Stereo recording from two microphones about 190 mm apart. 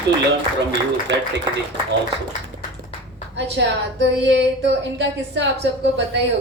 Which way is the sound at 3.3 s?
65° right (ahead or behind).